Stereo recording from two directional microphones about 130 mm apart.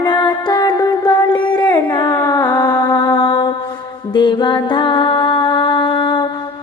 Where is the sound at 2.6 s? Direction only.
30° left (ahead or behind).